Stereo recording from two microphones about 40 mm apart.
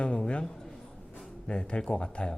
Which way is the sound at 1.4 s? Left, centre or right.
Left.